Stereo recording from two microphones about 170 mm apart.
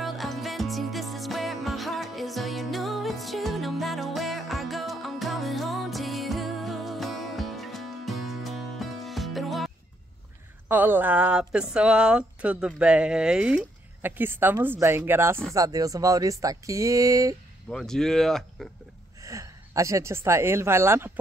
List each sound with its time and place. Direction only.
0.0 s music: centre (ahead or behind)
10.7 s speech: 10° right (ahead or behind)
17.6 s speech: 5° left (ahead or behind)
19.2 s a woman's voice: 20° right (ahead or behind)